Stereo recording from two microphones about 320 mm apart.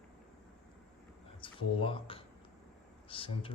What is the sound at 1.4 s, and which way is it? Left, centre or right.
Speech, centre.